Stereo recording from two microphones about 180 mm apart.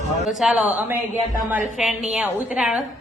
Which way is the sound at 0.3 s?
Centre (ahead or behind).